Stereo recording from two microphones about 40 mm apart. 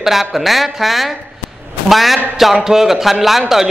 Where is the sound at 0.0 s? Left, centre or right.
Centre.